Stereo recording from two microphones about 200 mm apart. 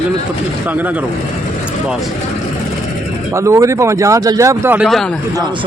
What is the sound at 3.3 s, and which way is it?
Speech, 15° right (ahead or behind).